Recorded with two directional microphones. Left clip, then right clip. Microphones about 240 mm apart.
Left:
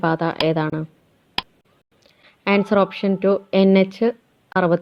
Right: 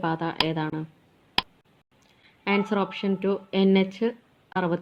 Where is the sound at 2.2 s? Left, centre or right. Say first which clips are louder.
Left 6 dB; left.